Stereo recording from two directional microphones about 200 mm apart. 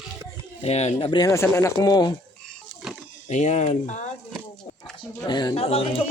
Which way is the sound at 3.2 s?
35° left (ahead or behind).